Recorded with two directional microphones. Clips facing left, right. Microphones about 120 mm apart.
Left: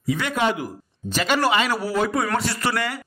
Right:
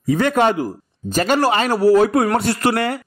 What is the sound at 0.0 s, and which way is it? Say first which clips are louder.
A man's voice: right 7 dB; 45° right (ahead or behind).